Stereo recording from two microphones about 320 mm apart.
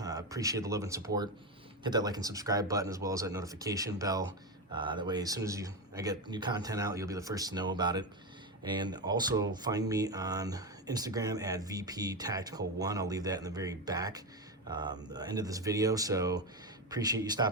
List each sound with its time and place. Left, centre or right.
0.0 s speech: centre